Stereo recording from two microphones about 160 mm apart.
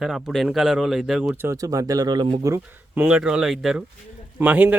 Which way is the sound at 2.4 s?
15° right (ahead or behind).